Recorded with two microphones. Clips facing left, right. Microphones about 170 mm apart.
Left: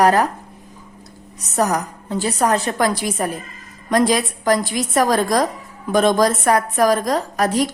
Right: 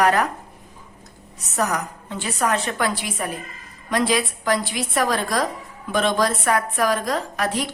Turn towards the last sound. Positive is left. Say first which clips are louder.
# left 6 dB
turn(degrees=40)  # may be behind; listen again after turning